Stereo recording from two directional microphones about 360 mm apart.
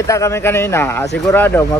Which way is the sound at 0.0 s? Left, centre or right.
Centre.